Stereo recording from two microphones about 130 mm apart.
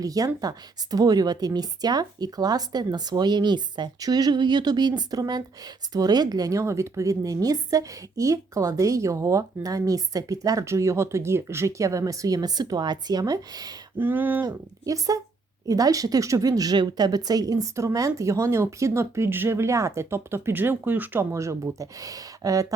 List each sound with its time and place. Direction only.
0.0 s speech: 30° right (ahead or behind)
14.0 s speech: 15° right (ahead or behind)
14.4 s speech: 25° right (ahead or behind)